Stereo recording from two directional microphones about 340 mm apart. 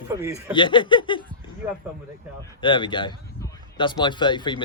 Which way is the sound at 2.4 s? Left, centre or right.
Centre.